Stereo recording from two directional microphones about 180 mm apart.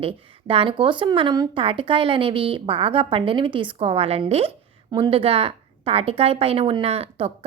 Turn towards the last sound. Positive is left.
turn(degrees=-35)  # may be behind; listen again after turning